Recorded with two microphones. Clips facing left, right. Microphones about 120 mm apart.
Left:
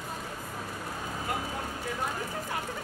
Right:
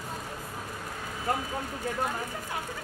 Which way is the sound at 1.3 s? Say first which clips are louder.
Right 5 dB; 35° right (ahead or behind).